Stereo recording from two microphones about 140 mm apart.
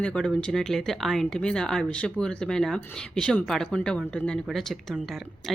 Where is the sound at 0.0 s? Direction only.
5° left (ahead or behind).